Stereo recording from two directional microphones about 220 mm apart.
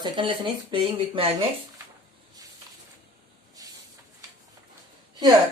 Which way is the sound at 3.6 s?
15° right (ahead or behind).